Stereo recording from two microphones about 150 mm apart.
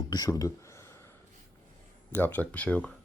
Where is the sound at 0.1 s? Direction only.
25° left (ahead or behind).